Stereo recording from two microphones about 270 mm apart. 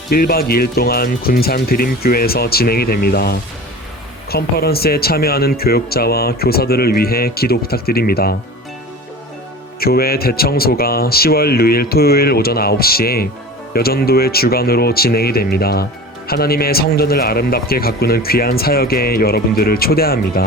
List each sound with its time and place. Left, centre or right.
0.1 s speech: left
9.8 s speech: left